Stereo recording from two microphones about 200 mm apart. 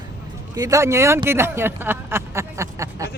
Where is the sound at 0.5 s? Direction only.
15° right (ahead or behind).